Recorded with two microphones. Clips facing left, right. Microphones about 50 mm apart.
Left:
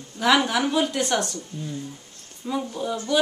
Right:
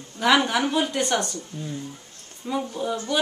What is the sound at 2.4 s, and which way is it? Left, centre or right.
Speech, centre.